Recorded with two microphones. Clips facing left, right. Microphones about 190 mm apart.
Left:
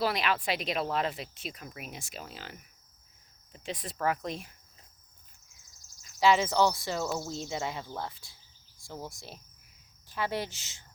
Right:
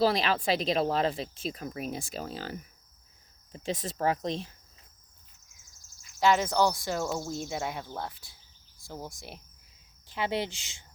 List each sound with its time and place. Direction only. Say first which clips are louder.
0.0 s speech: right 4 dB; 30° right (ahead or behind)
6.1 s speech: even; centre (ahead or behind)
8.8 s cricket: right 1 dB; 5° right (ahead or behind)
10.1 s speech: right 2 dB; 20° right (ahead or behind)